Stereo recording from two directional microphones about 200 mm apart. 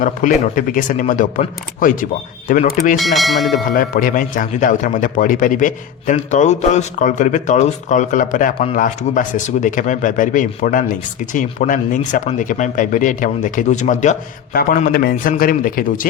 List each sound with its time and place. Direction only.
0.0 s speech: 40° left (ahead or behind)
3.0 s speech: centre (ahead or behind)
3.7 s speech: 45° left (ahead or behind)